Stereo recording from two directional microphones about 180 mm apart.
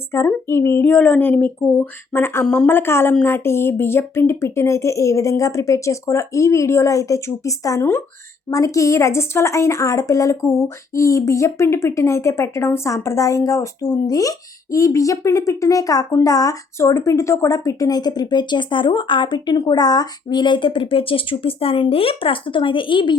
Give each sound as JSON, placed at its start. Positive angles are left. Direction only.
{"t": 0.1, "sound": "a woman's voice", "side_deg": 15}